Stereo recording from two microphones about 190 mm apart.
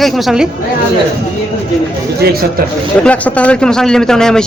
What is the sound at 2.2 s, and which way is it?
Speech, 55° right (ahead or behind).